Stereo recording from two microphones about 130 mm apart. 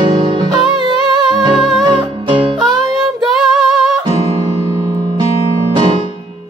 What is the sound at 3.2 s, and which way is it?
Female singing, 5° right (ahead or behind).